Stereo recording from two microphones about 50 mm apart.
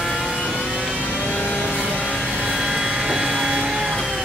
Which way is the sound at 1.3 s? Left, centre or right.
Left.